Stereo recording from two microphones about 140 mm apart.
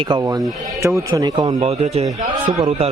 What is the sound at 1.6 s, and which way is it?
A man's voice, 50° right (ahead or behind).